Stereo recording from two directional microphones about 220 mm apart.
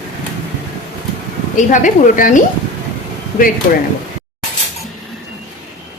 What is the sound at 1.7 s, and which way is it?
A woman's voice, 35° left (ahead or behind).